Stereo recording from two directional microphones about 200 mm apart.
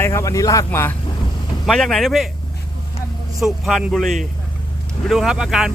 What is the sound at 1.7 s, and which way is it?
Speech, centre (ahead or behind).